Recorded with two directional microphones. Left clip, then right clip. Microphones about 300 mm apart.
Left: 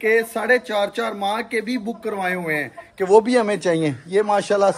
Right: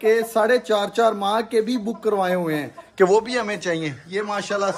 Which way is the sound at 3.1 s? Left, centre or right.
Centre.